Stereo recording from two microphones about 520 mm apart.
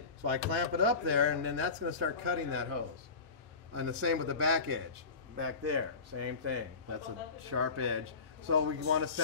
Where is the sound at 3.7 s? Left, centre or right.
Right.